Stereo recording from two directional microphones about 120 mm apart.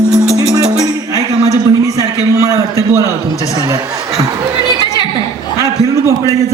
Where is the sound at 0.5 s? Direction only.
30° right (ahead or behind).